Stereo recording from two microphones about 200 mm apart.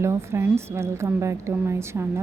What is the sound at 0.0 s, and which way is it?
A woman's voice, 15° right (ahead or behind).